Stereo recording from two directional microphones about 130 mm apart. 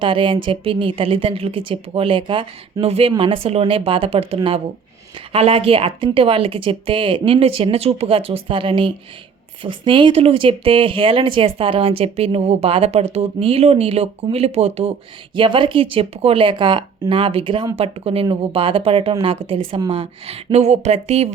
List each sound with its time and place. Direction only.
0.0 s a woman's voice: 40° right (ahead or behind)
2.8 s speech: 50° right (ahead or behind)
15.4 s a woman's voice: 40° right (ahead or behind)